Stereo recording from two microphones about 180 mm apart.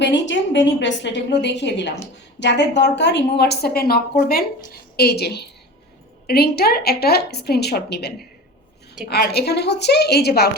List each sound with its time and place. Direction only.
0.0 s a woman's voice: 80° left; by 10.6 s 60° left (ahead or behind)